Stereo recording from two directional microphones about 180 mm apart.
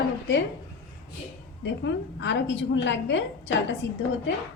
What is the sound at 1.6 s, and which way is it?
A woman's voice, 85° left.